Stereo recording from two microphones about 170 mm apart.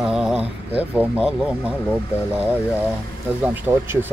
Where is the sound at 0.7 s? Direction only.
10° right (ahead or behind).